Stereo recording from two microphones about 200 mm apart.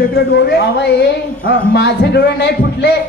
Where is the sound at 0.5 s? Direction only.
55° left (ahead or behind).